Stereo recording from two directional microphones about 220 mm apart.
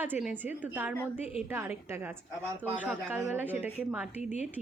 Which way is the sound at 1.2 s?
30° left (ahead or behind).